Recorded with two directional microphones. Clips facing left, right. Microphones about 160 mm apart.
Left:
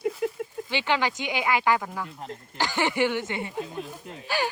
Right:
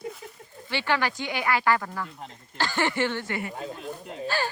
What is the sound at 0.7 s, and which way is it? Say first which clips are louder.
Speech: even; 15° left (ahead or behind).